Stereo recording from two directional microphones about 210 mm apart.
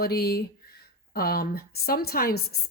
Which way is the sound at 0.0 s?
50° left (ahead or behind).